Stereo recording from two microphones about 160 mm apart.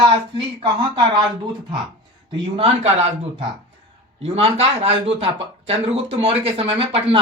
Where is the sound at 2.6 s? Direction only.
40° right (ahead or behind).